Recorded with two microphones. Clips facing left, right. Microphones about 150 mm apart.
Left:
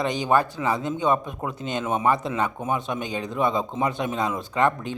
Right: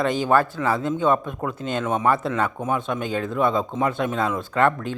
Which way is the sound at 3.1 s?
15° left (ahead or behind).